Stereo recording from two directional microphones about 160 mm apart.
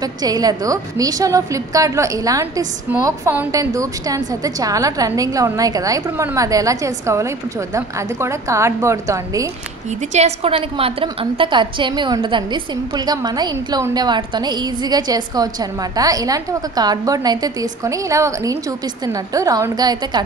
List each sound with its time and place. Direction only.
0.2 s a woman's voice: 25° right (ahead or behind)
10.1 s a woman's voice: 40° right (ahead or behind); by 20.2 s 25° right (ahead or behind)